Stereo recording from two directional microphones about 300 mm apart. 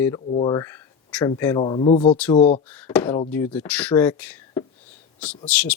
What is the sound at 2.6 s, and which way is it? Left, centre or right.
Speech, centre.